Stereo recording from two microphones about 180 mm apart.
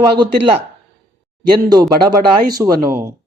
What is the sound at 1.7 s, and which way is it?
Speech, 20° right (ahead or behind).